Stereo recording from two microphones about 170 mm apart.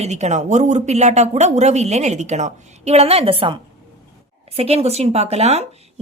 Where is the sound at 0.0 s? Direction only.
40° right (ahead or behind).